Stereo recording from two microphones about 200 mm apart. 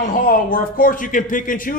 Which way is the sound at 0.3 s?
45° left (ahead or behind).